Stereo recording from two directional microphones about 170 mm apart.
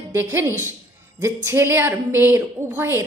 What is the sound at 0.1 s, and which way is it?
A woman's voice, 15° right (ahead or behind).